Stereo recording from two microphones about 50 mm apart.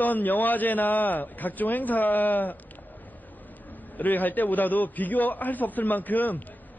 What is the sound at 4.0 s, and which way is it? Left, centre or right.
A man's voice, left.